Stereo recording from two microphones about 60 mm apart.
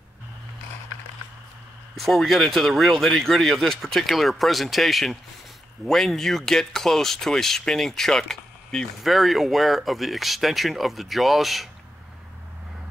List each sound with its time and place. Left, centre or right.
2.0 s speech: centre